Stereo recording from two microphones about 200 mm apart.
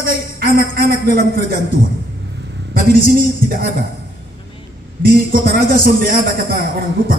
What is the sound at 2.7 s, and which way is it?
Speech, 45° right (ahead or behind).